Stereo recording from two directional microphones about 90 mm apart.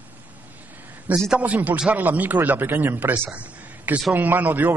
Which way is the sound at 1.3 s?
15° right (ahead or behind).